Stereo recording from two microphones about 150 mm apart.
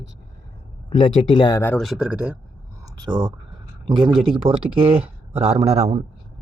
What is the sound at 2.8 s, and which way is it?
A man's voice, 25° right (ahead or behind).